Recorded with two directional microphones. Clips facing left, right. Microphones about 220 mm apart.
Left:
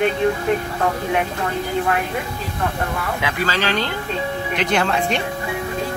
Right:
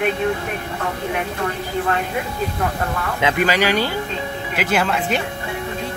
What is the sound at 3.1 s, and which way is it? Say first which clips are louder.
Speech: right 7 dB; 20° right (ahead or behind).